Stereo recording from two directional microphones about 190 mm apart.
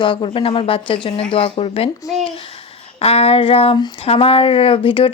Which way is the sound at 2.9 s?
30° left (ahead or behind).